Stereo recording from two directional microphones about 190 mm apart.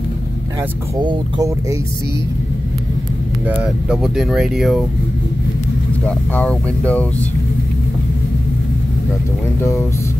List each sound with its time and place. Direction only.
0.9 s speech: 20° right (ahead or behind)
3.4 s speech: 5° right (ahead or behind)
6.0 s speech: 5° left (ahead or behind)
9.6 s speech: 15° left (ahead or behind)